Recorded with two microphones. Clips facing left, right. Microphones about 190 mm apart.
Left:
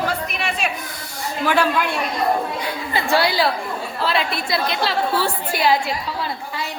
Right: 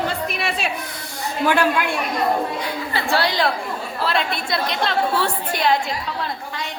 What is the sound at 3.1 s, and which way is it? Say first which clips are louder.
A woman's voice: left 2 dB; 10° left (ahead or behind).